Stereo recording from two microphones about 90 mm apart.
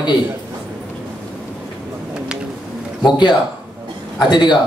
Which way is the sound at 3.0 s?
55° left (ahead or behind).